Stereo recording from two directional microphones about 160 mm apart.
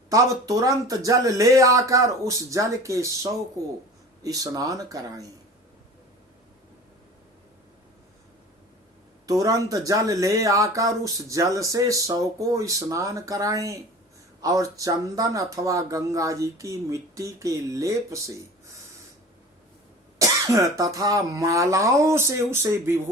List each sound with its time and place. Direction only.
0.1 s speech: 20° right (ahead or behind)
9.2 s speech: 20° right (ahead or behind)
20.1 s speech: 20° right (ahead or behind)